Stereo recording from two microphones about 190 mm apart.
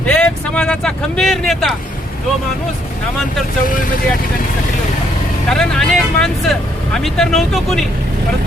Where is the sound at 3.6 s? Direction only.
45° left (ahead or behind).